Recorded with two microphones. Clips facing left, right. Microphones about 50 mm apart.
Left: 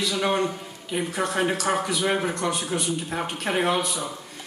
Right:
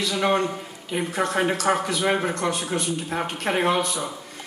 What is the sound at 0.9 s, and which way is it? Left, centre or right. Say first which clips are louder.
A man's voice: right 2 dB; centre.